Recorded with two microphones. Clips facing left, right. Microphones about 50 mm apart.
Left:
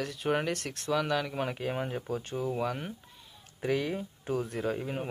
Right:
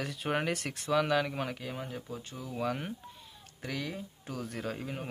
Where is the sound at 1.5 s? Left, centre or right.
Left.